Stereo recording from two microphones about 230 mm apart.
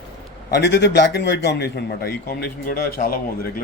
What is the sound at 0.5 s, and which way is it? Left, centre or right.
A man's voice, left.